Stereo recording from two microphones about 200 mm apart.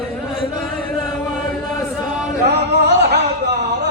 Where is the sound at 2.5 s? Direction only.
55° right (ahead or behind).